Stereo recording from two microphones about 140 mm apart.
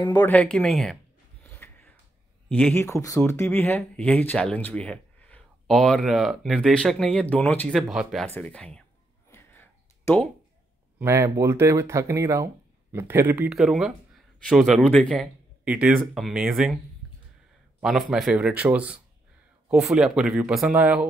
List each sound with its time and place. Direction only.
0.0 s speech: 30° left (ahead or behind)
0.3 s speech: 5° left (ahead or behind)
1.4 s a sound: 10° left (ahead or behind)
2.5 s speech: 15° left (ahead or behind)
7.7 s speech: centre (ahead or behind)
8.3 s speech: 10° left (ahead or behind)
9.3 s a sound: 15° left (ahead or behind)
11.0 s a man's voice: 20° right (ahead or behind)
13.5 s speech: 5° right (ahead or behind)
15.6 s speech: 10° right (ahead or behind)
17.0 s a sound: centre (ahead or behind)
17.8 s a man's voice: centre (ahead or behind)